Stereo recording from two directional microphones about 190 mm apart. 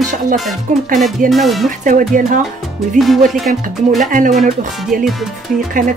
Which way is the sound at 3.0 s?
Centre (ahead or behind).